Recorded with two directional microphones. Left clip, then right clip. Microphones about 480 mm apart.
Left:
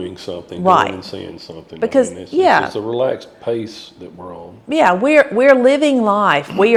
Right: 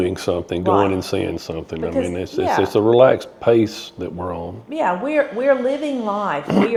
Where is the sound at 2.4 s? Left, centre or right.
Left.